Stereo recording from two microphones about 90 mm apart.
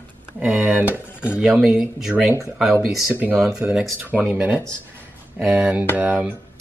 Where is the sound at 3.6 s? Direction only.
20° right (ahead or behind).